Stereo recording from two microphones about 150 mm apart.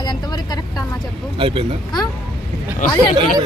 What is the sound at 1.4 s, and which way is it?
Speech, 35° right (ahead or behind).